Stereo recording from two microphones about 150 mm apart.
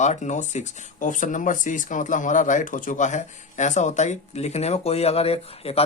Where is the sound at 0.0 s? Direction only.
50° left (ahead or behind).